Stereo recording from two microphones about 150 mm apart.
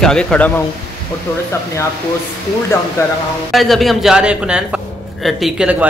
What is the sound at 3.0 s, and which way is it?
Speech, 15° left (ahead or behind).